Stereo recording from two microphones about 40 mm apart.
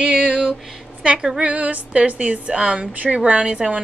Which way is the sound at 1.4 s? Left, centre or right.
Right.